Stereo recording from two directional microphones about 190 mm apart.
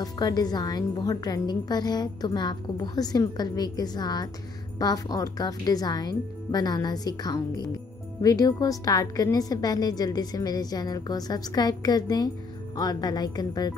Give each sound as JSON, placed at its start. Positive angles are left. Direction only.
{"t": 0.0, "sound": "a woman's voice", "side_deg": 20}